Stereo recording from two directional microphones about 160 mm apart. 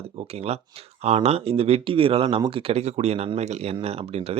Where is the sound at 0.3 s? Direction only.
40° right (ahead or behind).